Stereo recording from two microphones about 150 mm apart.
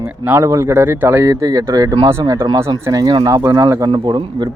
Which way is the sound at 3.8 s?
30° right (ahead or behind).